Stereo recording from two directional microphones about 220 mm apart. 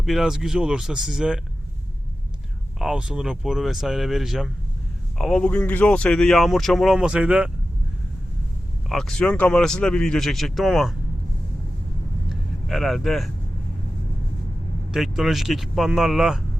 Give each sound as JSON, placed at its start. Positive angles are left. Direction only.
{"t": 0.0, "sound": "speech", "side_deg": 0}
{"t": 2.7, "sound": "speech", "side_deg": 0}
{"t": 8.9, "sound": "speech", "side_deg": 0}
{"t": 12.3, "sound": "speech", "side_deg": 0}
{"t": 14.9, "sound": "speech", "side_deg": 0}